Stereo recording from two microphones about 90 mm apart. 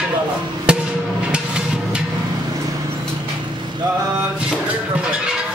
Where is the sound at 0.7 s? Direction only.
10° right (ahead or behind).